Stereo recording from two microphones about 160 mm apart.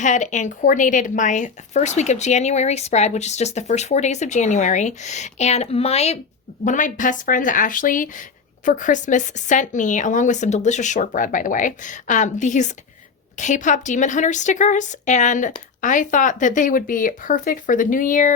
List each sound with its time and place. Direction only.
0.0 s a woman's voice: 50° left (ahead or behind)
6.7 s a woman's voice: 55° left (ahead or behind)